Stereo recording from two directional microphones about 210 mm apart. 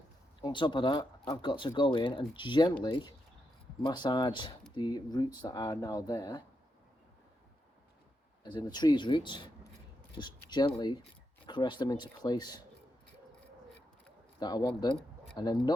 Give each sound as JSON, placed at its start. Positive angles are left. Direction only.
{"t": 0.4, "sound": "speech", "side_deg": 20}
{"t": 8.4, "sound": "speech", "side_deg": 20}
{"t": 14.3, "sound": "speech", "side_deg": 20}